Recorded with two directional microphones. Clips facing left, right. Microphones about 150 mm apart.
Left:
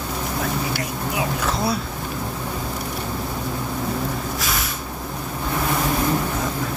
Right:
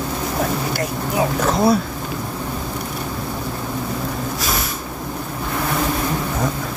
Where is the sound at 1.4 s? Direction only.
45° right (ahead or behind).